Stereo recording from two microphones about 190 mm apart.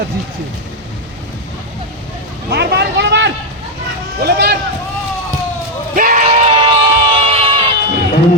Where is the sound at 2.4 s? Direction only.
60° right (ahead or behind).